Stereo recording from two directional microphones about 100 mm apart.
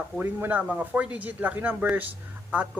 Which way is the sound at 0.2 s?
20° right (ahead or behind).